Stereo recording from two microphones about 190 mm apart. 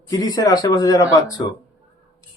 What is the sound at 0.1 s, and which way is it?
Speech, 20° left (ahead or behind).